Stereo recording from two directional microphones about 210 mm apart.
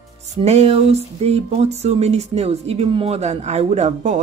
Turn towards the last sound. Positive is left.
turn(degrees=-35)  # may be behind; listen again after turning